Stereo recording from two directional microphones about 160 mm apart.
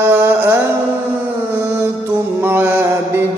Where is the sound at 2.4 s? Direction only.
15° right (ahead or behind).